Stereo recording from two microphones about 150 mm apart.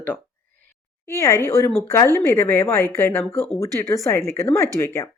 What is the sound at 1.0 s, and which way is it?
Speech, 20° left (ahead or behind).